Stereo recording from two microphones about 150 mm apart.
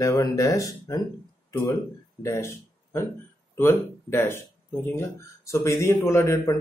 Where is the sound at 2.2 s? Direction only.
15° left (ahead or behind).